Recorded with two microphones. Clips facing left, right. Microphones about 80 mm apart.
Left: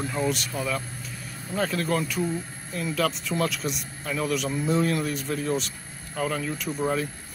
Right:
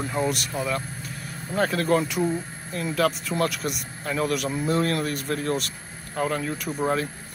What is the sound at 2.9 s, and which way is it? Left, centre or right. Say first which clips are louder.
Speech: right 3 dB; centre.